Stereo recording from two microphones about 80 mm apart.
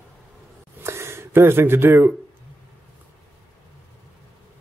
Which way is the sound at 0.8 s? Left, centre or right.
Right.